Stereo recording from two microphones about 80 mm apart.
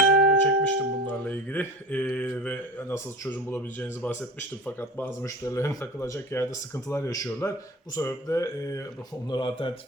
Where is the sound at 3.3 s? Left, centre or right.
Left.